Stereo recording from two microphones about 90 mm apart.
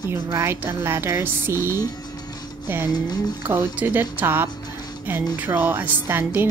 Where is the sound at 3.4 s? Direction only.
25° right (ahead or behind).